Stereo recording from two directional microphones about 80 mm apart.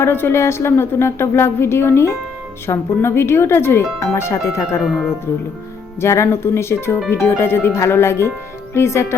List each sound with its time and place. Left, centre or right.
0.0 s a woman's voice: left
4.8 s speech: centre
6.0 s a woman's voice: left